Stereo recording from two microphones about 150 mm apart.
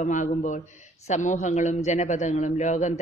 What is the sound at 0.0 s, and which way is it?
A man's voice, 55° left (ahead or behind).